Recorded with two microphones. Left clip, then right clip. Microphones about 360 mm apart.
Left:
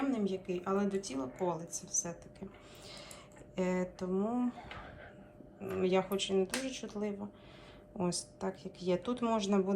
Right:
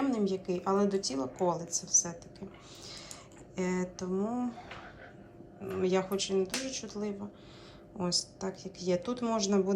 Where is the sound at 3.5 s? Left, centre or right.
Centre.